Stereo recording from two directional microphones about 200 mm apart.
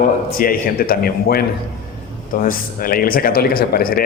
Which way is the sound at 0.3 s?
45° left (ahead or behind).